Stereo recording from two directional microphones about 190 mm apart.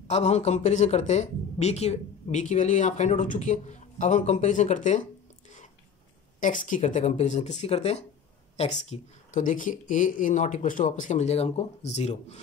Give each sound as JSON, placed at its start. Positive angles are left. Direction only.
{"t": 0.1, "sound": "speech", "side_deg": 35}
{"t": 6.4, "sound": "speech", "side_deg": 45}